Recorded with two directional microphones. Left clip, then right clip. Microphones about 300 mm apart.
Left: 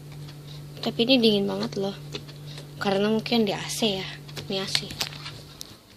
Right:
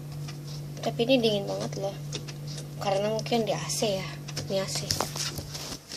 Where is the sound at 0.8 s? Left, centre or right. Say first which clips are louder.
Left 3 dB; left.